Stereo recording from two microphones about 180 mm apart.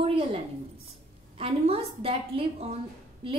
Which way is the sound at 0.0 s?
30° right (ahead or behind).